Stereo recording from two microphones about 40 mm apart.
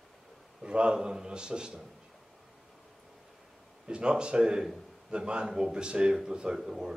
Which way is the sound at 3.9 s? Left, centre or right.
Right.